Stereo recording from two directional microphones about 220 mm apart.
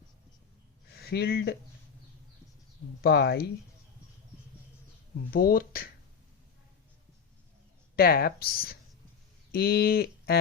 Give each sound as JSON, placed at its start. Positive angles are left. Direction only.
{"t": 0.9, "sound": "speech", "side_deg": 45}
{"t": 3.0, "sound": "speech", "side_deg": 45}
{"t": 5.3, "sound": "speech", "side_deg": 40}
{"t": 7.9, "sound": "speech", "side_deg": 45}